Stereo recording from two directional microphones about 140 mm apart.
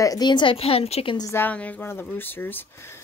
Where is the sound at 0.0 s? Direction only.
30° left (ahead or behind); by 1.1 s 45° left (ahead or behind).